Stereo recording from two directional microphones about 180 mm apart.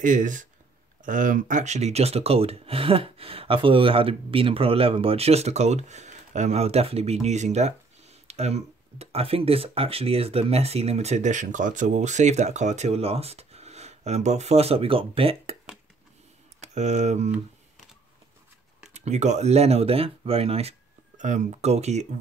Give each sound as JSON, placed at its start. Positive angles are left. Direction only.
{"t": 0.0, "sound": "speech", "side_deg": -45}
{"t": 16.6, "sound": "speech", "side_deg": -40}
{"t": 18.9, "sound": "speech", "side_deg": -40}